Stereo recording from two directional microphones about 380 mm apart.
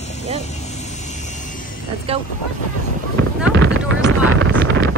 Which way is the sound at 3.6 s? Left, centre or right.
Centre.